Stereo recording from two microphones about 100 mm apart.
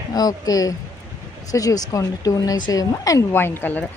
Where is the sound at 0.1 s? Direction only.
40° left (ahead or behind).